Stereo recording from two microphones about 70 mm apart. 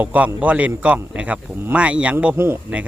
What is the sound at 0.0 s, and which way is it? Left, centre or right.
Speech, right.